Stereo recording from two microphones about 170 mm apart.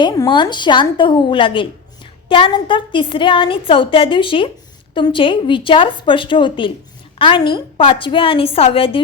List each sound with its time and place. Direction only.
0.0 s a woman's voice: 25° left (ahead or behind)